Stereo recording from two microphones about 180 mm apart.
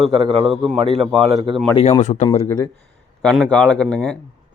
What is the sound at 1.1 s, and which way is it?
Speech, 35° right (ahead or behind).